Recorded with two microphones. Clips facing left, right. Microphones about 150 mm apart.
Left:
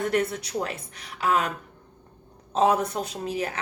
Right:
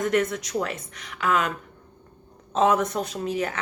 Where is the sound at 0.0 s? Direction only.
35° left (ahead or behind).